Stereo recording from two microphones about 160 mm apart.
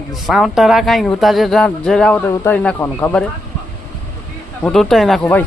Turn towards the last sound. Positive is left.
turn(degrees=0)  # may be behind; listen again after turning